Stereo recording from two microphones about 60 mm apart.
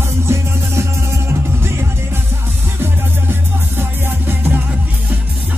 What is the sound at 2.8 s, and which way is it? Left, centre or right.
Music, right.